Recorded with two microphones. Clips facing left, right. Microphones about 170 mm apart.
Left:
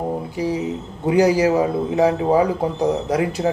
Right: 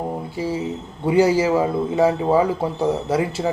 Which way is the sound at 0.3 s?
15° left (ahead or behind).